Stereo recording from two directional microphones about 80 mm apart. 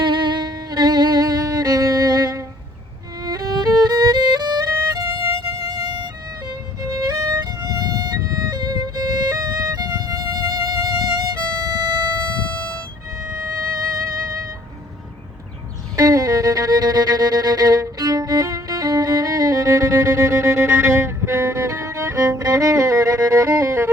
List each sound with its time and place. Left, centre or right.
0.0 s music: right
3.2 s violin: right
7.1 s music: right
7.4 s violin: right
11.6 s music: right
13.6 s music: right
16.0 s violin: right
21.5 s music: right